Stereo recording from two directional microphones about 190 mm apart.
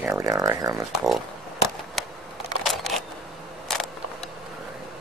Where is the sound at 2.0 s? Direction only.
Centre (ahead or behind).